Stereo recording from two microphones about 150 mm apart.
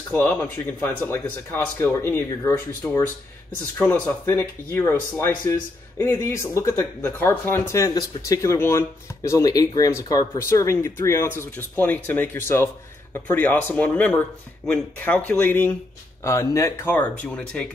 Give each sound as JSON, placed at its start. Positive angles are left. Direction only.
{"t": 0.1, "sound": "speech", "side_deg": 15}